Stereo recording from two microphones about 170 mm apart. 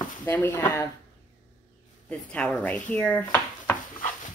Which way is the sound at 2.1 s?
5° left (ahead or behind).